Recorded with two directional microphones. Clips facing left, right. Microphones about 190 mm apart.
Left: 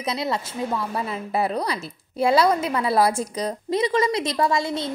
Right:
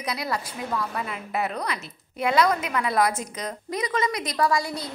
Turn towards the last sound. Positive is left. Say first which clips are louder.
# left 2 dB
turn(degrees=25)  # may be behind; listen again after turning